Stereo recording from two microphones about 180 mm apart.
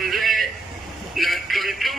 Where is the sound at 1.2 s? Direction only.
Centre (ahead or behind).